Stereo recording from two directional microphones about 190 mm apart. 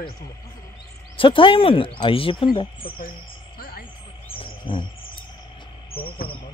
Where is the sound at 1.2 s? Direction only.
25° left (ahead or behind).